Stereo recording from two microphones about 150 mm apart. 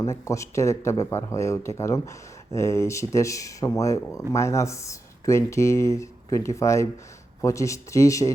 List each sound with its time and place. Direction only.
0.0 s speech: 20° left (ahead or behind)